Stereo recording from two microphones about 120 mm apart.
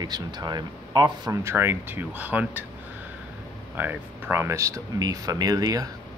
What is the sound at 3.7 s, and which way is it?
Speech, 15° right (ahead or behind).